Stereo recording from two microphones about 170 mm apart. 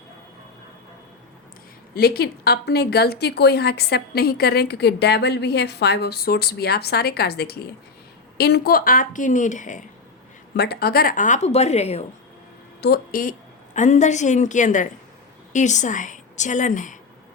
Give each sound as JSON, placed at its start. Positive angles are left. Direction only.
{"t": 2.0, "sound": "a woman's voice", "side_deg": 65}
{"t": 10.6, "sound": "a woman's voice", "side_deg": 70}
{"t": 12.8, "sound": "a woman's voice", "side_deg": 60}
{"t": 13.7, "sound": "a woman's voice", "side_deg": 45}